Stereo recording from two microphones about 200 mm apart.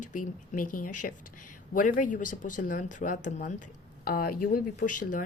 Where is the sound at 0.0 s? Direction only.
40° left (ahead or behind).